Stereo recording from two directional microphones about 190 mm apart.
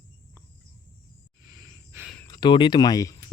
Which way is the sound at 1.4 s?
20° right (ahead or behind).